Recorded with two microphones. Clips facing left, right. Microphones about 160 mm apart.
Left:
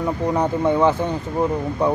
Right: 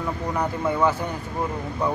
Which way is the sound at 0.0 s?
25° left (ahead or behind).